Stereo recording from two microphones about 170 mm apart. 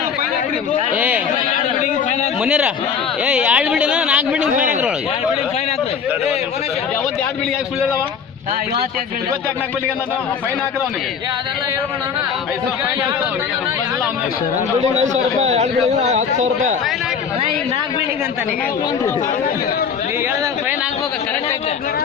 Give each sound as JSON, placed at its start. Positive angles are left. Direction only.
{"t": 0.9, "sound": "a sound", "side_deg": -10}
{"t": 1.5, "sound": "chatter", "side_deg": 45}
{"t": 2.4, "sound": "speech", "side_deg": -5}
{"t": 4.5, "sound": "speech", "side_deg": -50}
{"t": 14.9, "sound": "a man's voice", "side_deg": -45}